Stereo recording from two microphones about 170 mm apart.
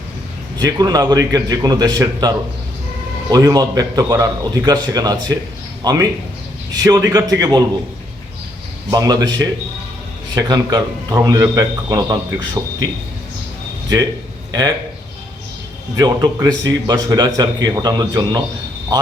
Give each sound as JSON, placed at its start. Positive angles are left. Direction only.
{"t": 0.6, "sound": "a man's voice", "side_deg": -20}
{"t": 8.9, "sound": "a man's voice", "side_deg": -20}
{"t": 16.0, "sound": "a man's voice", "side_deg": -20}